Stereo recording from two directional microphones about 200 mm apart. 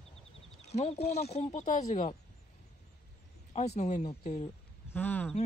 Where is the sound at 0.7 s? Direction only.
30° left (ahead or behind).